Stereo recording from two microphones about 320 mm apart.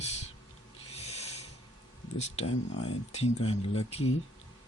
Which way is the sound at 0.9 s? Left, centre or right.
Centre.